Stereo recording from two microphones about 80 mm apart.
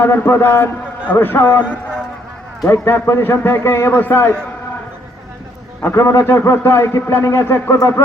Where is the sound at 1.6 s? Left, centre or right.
Centre.